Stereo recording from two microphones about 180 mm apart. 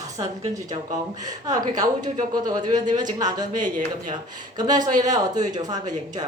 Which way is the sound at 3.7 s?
45° right (ahead or behind).